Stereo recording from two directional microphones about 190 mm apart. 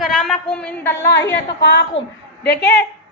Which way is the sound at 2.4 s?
60° left (ahead or behind).